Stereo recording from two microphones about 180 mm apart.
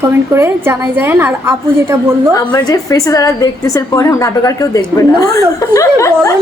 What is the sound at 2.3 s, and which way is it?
A woman's voice, 20° left (ahead or behind).